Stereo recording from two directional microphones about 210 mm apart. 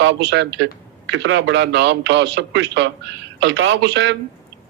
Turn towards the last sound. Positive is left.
turn(degrees=-55)  # may be behind; listen again after turning